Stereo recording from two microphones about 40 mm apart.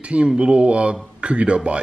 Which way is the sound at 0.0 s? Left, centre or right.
Right.